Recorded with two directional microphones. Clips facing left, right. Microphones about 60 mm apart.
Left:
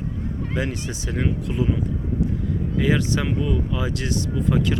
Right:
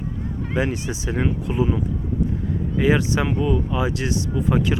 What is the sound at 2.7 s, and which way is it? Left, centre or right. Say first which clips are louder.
Speech: right 3 dB; right.